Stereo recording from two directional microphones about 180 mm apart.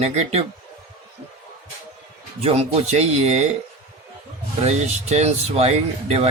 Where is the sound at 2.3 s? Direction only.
35° right (ahead or behind).